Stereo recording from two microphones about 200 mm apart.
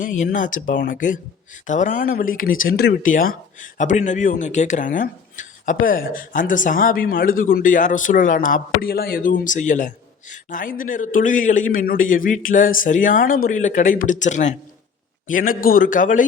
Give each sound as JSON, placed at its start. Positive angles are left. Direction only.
{"t": 0.0, "sound": "speech", "side_deg": 40}